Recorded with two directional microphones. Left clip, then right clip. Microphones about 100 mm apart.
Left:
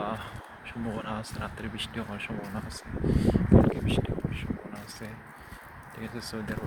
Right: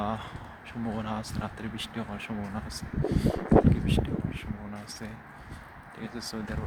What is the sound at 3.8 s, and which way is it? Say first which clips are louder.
Speech: left 1 dB; 35° right (ahead or behind).